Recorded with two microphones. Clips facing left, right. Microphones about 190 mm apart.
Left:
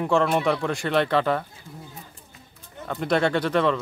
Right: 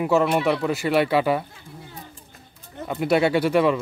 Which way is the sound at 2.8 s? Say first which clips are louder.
Right 3 dB; 10° right (ahead or behind).